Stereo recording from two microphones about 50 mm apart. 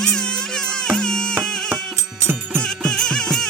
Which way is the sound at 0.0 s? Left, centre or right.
Centre.